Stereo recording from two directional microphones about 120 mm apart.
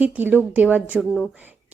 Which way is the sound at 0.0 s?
15° right (ahead or behind).